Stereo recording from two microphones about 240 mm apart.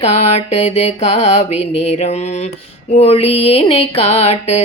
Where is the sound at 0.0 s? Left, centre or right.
Left.